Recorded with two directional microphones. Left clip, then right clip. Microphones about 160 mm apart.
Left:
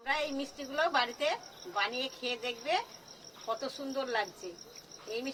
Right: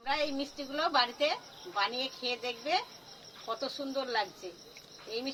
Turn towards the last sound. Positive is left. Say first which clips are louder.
# right 1 dB
turn(degrees=5)  # may be behind; listen again after turning